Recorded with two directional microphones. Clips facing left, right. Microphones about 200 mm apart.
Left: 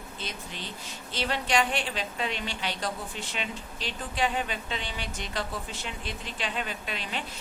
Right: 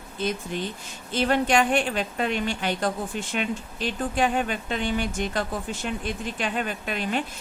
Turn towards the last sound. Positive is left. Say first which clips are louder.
# right 8 dB
turn(degrees=-50)  # may be behind; listen again after turning